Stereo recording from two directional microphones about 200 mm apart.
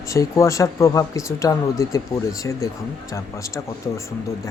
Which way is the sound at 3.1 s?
15° left (ahead or behind).